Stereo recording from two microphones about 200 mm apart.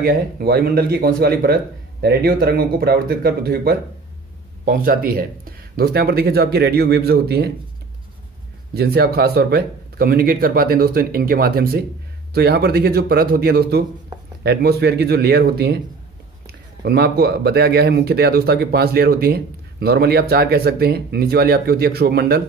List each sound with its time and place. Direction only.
0.0 s a man's voice: 50° right (ahead or behind)
8.7 s a man's voice: 50° right (ahead or behind)
16.8 s a man's voice: 55° right (ahead or behind)